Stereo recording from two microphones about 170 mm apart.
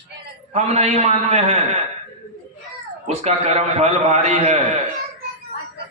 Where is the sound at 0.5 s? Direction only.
40° right (ahead or behind).